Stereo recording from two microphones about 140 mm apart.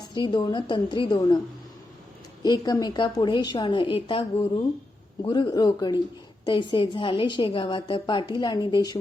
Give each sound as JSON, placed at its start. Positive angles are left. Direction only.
{"t": 0.1, "sound": "a woman's voice", "side_deg": 35}
{"t": 2.4, "sound": "a woman's voice", "side_deg": 30}